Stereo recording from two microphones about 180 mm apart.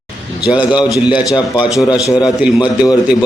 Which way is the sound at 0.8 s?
20° left (ahead or behind).